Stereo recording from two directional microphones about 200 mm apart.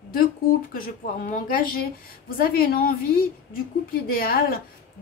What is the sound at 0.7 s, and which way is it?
A woman's voice, 45° left (ahead or behind).